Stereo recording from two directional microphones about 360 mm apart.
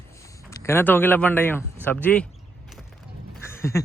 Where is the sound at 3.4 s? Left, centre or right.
Centre.